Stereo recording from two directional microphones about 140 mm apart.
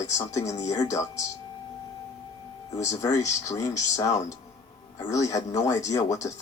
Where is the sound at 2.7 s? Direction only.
20° left (ahead or behind).